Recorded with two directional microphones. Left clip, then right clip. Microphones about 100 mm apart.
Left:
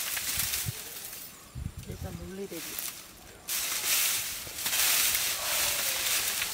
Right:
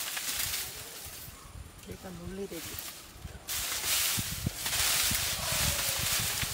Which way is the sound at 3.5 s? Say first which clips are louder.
Left 2 dB; centre (ahead or behind).